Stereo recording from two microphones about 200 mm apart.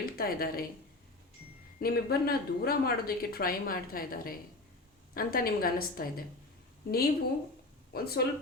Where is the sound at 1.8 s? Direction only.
50° left (ahead or behind).